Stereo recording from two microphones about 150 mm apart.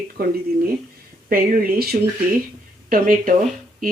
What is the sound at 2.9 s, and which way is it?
Speech, 65° right (ahead or behind).